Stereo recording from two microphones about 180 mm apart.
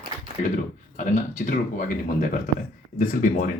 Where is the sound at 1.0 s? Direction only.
45° left (ahead or behind).